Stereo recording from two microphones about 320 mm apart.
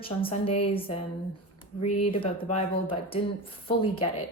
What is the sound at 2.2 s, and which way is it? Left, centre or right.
Speech, centre.